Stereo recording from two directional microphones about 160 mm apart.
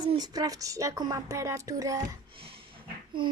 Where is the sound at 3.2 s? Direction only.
30° right (ahead or behind).